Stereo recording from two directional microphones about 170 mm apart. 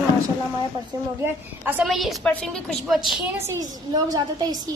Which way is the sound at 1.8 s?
Centre (ahead or behind).